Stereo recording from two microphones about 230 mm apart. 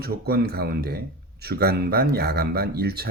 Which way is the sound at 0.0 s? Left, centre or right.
Right.